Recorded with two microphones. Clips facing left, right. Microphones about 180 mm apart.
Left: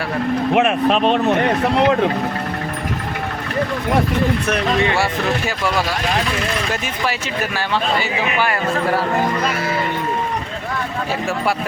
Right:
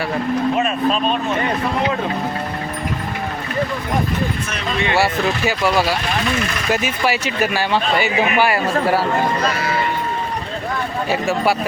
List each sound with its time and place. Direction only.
0.5 s speech: 70° left (ahead or behind)
6.7 s a man's voice: 5° right (ahead or behind)